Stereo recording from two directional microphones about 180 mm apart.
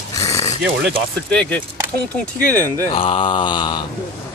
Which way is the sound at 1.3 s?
5° left (ahead or behind).